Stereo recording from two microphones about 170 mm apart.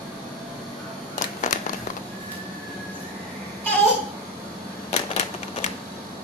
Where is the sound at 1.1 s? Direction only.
45° left (ahead or behind).